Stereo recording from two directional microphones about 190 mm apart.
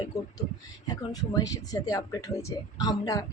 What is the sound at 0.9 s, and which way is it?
Speech, 20° left (ahead or behind).